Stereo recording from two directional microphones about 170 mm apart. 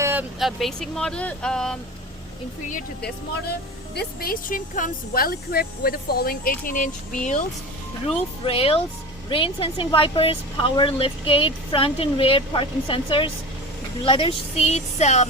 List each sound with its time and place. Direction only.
0.0 s vehicle: 10° right (ahead or behind)
0.3 s speech: centre (ahead or behind)
3.9 s speech: 60° left (ahead or behind)
8.0 s speech: 35° left (ahead or behind)